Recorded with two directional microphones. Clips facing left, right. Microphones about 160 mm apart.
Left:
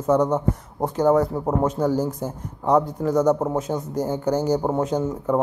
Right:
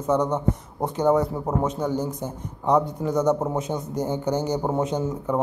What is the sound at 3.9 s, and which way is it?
Speech, 20° right (ahead or behind).